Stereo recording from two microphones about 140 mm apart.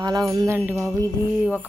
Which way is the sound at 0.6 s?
10° right (ahead or behind).